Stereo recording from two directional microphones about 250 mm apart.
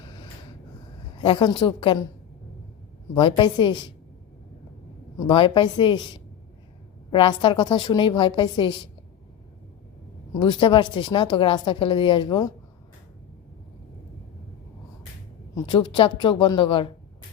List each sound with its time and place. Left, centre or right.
1.2 s a woman's voice: centre
3.2 s a woman's voice: centre
5.2 s a woman's voice: centre
10.4 s a woman's voice: centre
15.5 s a woman's voice: centre